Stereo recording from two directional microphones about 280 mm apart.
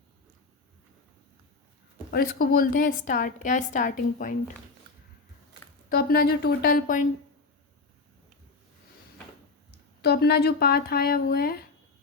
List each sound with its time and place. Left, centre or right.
2.0 s a woman's voice: left
5.9 s speech: left
10.0 s speech: left